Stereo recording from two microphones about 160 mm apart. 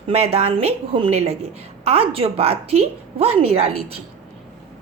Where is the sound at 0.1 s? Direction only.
40° right (ahead or behind).